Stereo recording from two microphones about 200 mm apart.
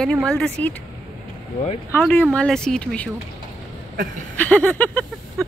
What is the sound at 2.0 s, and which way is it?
Speech, 5° left (ahead or behind).